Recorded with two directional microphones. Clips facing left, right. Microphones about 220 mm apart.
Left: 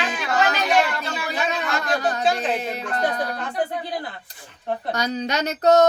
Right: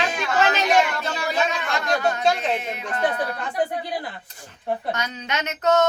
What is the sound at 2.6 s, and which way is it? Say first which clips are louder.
Speech: even; 40° left (ahead or behind).